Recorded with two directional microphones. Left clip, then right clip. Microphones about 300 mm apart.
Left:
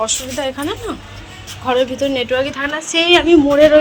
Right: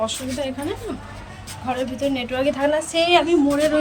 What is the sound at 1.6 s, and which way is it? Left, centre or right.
A woman's voice, centre.